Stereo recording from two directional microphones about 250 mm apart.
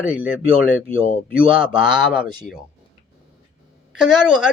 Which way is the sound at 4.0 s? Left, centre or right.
Centre.